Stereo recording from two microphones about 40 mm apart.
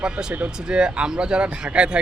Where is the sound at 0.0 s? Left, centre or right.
Centre.